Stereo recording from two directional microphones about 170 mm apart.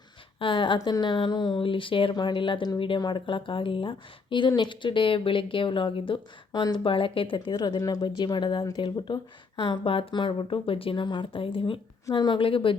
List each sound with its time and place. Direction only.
0.3 s speech: 30° left (ahead or behind)